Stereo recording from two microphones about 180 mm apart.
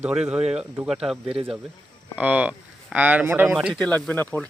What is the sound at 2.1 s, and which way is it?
Speech, 10° right (ahead or behind).